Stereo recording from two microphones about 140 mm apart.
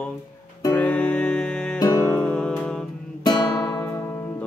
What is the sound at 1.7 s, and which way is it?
Music, 25° left (ahead or behind).